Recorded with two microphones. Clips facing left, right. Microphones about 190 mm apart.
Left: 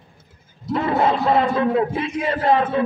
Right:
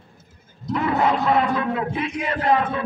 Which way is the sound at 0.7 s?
30° left (ahead or behind).